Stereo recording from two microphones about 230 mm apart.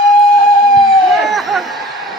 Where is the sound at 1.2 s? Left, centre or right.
Centre.